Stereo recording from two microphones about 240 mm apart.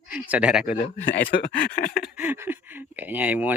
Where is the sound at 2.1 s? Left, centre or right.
Centre.